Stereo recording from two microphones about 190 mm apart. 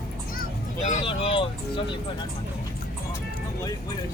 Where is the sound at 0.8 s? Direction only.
35° left (ahead or behind).